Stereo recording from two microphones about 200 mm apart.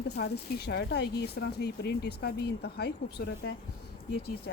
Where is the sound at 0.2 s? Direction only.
55° left (ahead or behind).